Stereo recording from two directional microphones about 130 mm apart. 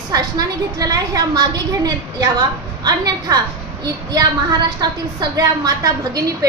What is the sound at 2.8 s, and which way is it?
A woman's voice, 30° right (ahead or behind).